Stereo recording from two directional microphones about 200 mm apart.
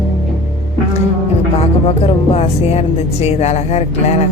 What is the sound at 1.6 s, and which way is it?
Speech, 30° left (ahead or behind).